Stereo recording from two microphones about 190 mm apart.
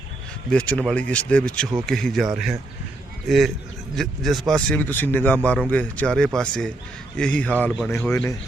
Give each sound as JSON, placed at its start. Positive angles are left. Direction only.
{"t": 0.5, "sound": "speech", "side_deg": 5}